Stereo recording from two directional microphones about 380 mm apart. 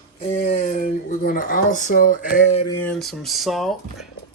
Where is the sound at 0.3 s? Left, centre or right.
Centre.